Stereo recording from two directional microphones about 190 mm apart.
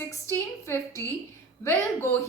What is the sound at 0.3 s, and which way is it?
Speech, 15° left (ahead or behind).